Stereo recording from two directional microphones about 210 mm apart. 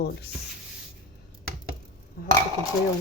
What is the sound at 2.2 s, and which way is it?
Dishes, 45° left (ahead or behind).